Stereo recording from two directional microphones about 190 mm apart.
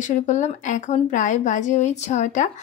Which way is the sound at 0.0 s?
40° left (ahead or behind).